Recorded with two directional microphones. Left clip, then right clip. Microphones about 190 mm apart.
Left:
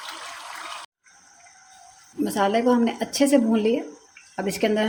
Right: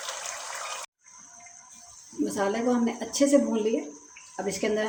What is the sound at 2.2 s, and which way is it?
A woman's voice, 40° left (ahead or behind).